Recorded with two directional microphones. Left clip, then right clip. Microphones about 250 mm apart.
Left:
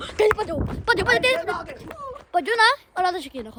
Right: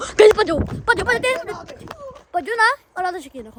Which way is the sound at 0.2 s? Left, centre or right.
Right.